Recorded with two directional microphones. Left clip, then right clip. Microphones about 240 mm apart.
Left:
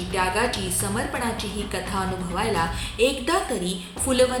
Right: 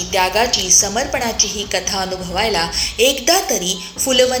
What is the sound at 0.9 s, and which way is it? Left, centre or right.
A woman's voice, left.